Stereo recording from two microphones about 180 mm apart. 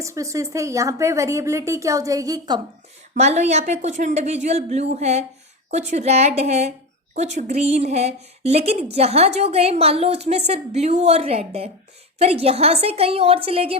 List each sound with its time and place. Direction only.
0.0 s speech: 15° right (ahead or behind)
3.2 s a woman's voice: 40° right (ahead or behind)